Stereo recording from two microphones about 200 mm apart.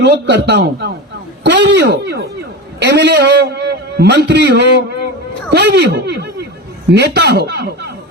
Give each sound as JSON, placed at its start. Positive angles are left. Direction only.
{"t": 0.0, "sound": "a man's voice", "side_deg": -60}